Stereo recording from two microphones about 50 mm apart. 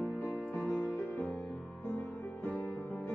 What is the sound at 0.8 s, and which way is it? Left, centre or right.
Music, left.